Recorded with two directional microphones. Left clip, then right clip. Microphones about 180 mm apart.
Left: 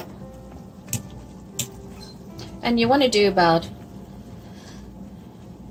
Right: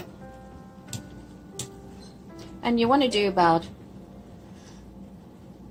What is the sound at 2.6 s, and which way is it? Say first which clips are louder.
A woman's voice: left 3 dB; 25° right (ahead or behind).